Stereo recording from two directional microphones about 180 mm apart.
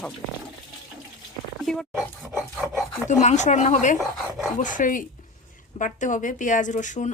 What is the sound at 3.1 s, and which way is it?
Speech, 40° left (ahead or behind).